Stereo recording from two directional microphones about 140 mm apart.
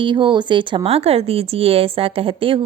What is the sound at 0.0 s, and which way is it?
A woman's voice, 35° right (ahead or behind).